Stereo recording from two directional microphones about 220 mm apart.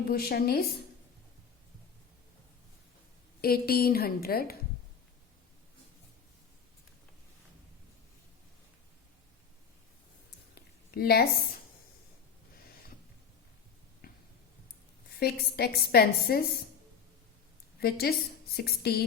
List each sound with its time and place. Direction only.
0.1 s a woman's voice: 45° left (ahead or behind)
3.4 s a woman's voice: 45° left (ahead or behind)
10.9 s a woman's voice: 45° left (ahead or behind)
14.0 s a sound: 45° left (ahead or behind)
15.2 s a woman's voice: 45° left (ahead or behind)
17.7 s a woman's voice: 45° left (ahead or behind)